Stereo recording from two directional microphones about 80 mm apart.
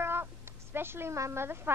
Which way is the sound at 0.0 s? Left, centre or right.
Right.